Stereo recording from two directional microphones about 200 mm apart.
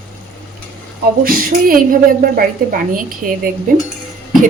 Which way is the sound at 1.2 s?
45° right (ahead or behind).